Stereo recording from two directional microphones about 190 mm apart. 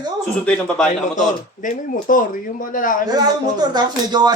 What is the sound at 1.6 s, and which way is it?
Speech, 45° left (ahead or behind).